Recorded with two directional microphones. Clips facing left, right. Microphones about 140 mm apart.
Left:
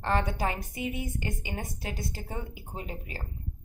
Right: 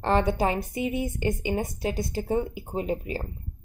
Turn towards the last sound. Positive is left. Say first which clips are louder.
# right 11 dB
turn(degrees=-25)  # may be behind; listen again after turning